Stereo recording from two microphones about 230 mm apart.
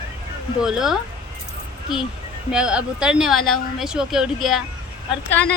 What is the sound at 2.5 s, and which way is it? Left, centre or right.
Speech, centre.